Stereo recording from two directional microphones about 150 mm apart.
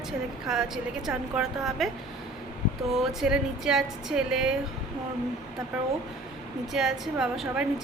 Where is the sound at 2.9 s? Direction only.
5° right (ahead or behind).